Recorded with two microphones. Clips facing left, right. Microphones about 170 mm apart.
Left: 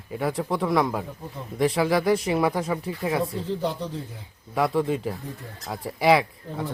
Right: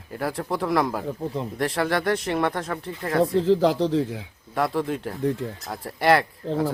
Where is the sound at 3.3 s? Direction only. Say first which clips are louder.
Right 9 dB; 90° right.